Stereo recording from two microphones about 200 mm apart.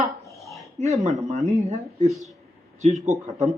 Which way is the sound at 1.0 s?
35° right (ahead or behind).